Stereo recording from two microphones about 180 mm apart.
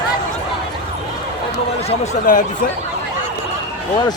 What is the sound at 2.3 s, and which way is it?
Speech, 45° left (ahead or behind).